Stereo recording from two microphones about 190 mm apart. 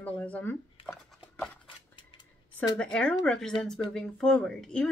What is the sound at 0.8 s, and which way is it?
Dog, centre (ahead or behind).